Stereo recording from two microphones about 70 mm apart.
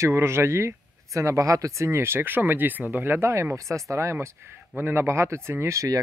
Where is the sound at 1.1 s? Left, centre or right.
Right.